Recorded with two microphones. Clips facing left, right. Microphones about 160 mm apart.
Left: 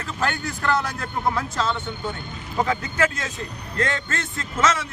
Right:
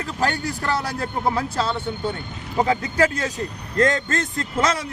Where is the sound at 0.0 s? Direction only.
35° right (ahead or behind).